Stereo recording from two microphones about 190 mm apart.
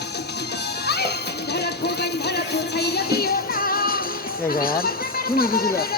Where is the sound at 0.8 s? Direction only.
60° left (ahead or behind).